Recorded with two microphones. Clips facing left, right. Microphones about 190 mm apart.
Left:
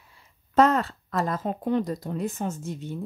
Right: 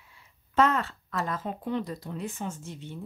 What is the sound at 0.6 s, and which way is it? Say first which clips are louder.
Speech: left 4 dB; 40° left (ahead or behind).